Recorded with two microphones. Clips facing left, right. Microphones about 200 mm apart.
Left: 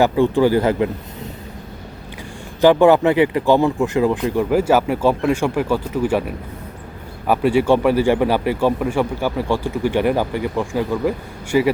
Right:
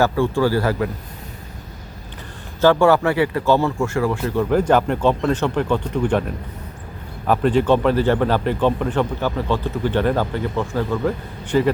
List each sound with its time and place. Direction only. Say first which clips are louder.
0.0 s speech: left 3 dB; 15° left (ahead or behind)
2.6 s speech: left 3 dB; 15° left (ahead or behind)